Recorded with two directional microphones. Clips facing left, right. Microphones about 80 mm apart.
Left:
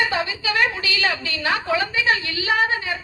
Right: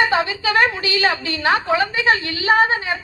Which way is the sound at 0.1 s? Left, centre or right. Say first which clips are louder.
Right 5 dB; right.